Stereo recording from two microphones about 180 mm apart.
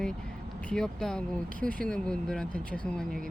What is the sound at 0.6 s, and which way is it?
Speech, 5° left (ahead or behind).